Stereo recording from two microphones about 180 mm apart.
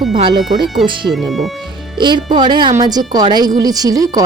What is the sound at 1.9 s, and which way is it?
Speech, 25° right (ahead or behind).